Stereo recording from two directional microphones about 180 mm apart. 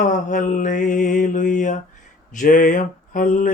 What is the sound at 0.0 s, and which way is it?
Mantra, 45° left (ahead or behind).